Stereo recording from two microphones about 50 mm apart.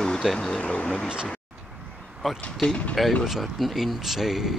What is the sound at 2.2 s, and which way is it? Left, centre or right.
Speech, centre.